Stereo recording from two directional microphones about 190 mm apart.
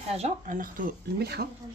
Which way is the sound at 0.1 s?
40° right (ahead or behind).